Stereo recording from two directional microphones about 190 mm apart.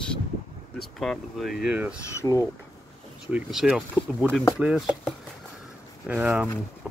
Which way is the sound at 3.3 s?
5° right (ahead or behind).